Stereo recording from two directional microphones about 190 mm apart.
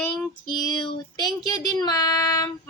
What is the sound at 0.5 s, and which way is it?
Child singing, 20° left (ahead or behind).